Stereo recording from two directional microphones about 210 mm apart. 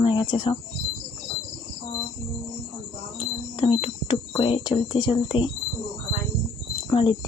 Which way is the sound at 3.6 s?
25° left (ahead or behind).